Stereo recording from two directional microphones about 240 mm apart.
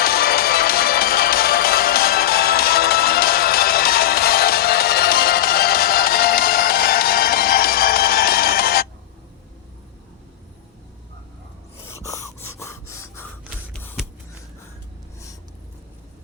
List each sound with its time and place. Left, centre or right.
0.0 s music: left
11.9 s gasp: centre